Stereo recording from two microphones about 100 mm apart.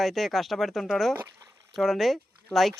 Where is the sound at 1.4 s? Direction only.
30° right (ahead or behind).